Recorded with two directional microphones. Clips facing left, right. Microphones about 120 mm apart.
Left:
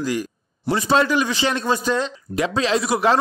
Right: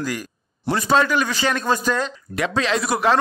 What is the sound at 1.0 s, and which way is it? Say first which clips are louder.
Speech: left 1 dB; 25° left (ahead or behind).